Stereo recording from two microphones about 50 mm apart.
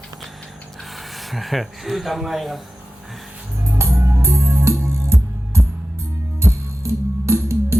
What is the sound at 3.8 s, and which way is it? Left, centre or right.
Music, right.